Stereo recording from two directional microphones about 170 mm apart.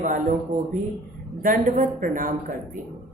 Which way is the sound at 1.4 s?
50° right (ahead or behind).